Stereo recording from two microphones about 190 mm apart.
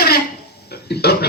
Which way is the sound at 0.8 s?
60° left (ahead or behind).